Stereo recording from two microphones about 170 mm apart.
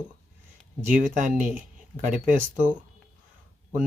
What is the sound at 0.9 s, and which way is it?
Speech, 50° right (ahead or behind).